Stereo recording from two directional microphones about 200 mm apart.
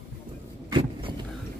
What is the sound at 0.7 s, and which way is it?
Vehicle, 25° right (ahead or behind).